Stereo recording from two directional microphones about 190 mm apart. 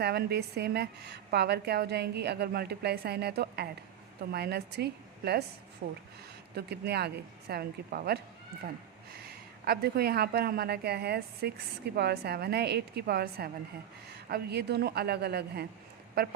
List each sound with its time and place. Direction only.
0.0 s a woman's voice: 55° right (ahead or behind)